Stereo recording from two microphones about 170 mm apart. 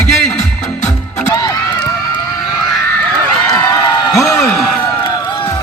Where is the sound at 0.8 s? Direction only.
45° left (ahead or behind).